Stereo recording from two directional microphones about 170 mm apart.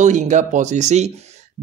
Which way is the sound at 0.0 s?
45° right (ahead or behind).